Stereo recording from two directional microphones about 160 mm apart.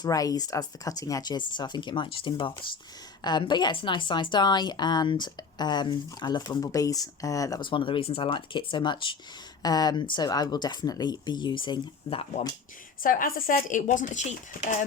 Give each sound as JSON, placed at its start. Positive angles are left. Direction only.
{"t": 0.0, "sound": "a woman's voice", "side_deg": 20}
{"t": 13.0, "sound": "a woman's voice", "side_deg": 60}